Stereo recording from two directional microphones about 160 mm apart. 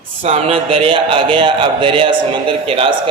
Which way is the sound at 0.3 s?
40° right (ahead or behind).